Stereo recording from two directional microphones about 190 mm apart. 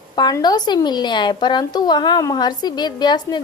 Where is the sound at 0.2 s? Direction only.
20° left (ahead or behind).